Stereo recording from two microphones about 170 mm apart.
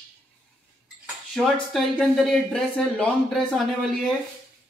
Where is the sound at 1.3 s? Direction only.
Centre (ahead or behind).